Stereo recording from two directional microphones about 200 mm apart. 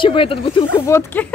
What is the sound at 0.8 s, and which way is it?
Speech, 15° left (ahead or behind).